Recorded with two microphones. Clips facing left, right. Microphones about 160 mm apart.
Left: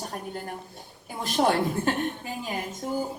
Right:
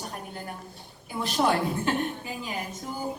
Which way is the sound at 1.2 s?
45° left (ahead or behind).